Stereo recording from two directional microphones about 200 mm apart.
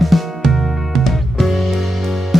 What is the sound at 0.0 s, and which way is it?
Music, centre (ahead or behind).